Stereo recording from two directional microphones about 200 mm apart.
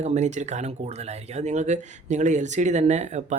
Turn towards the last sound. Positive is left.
turn(degrees=-35)  # may be behind; listen again after turning